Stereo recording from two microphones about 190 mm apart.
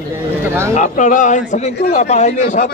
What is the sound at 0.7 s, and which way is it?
A man's voice, 40° left (ahead or behind).